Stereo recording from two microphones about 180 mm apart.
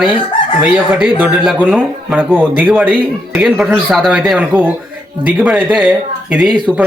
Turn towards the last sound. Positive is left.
turn(degrees=-5)  # may be behind; listen again after turning